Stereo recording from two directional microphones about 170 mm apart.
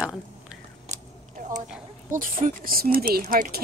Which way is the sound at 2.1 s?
55° right (ahead or behind).